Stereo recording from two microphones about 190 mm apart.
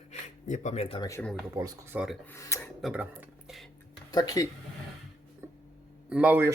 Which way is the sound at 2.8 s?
5° right (ahead or behind).